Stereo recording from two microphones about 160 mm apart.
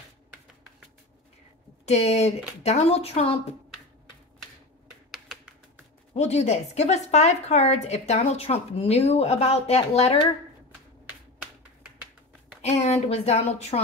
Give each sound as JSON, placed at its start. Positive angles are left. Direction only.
{"t": 1.9, "sound": "speech", "side_deg": 40}
{"t": 6.1, "sound": "a woman's voice", "side_deg": 45}
{"t": 12.6, "sound": "speech", "side_deg": 40}